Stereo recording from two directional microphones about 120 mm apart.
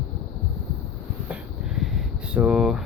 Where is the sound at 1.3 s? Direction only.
5° right (ahead or behind).